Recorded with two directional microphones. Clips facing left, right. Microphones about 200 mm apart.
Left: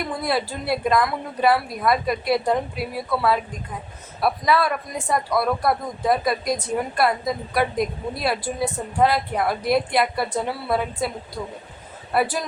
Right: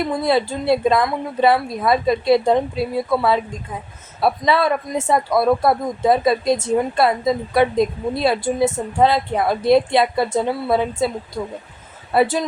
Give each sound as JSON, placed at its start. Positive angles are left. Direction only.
{"t": 0.2, "sound": "speech", "side_deg": -25}
{"t": 12.1, "sound": "speech", "side_deg": -25}